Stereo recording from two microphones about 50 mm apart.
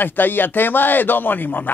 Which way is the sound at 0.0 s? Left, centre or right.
Left.